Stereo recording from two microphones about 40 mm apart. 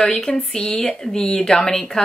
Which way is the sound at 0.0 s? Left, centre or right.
Centre.